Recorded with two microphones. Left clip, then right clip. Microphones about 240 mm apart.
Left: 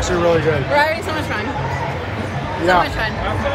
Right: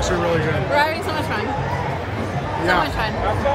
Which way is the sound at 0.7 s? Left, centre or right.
Centre.